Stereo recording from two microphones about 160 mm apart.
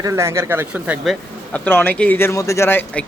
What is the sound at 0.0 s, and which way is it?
Speech, 20° right (ahead or behind).